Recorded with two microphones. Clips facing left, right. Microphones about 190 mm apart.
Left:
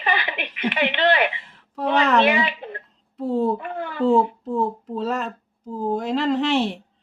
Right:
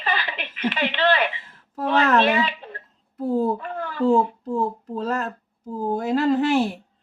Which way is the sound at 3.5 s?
15° left (ahead or behind).